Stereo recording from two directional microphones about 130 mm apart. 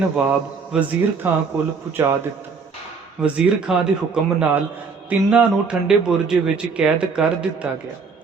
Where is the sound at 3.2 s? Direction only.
5° right (ahead or behind).